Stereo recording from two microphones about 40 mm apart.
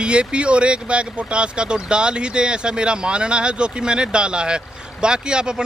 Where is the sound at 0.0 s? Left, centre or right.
Right.